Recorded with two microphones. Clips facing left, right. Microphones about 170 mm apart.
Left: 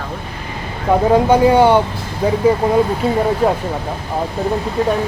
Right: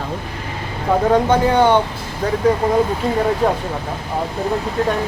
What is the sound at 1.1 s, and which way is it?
Speech, 10° left (ahead or behind).